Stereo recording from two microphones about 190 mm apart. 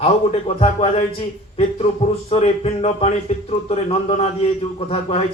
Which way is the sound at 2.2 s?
30° left (ahead or behind).